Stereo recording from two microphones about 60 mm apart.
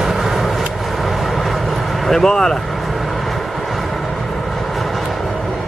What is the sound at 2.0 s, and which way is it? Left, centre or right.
Speech, centre.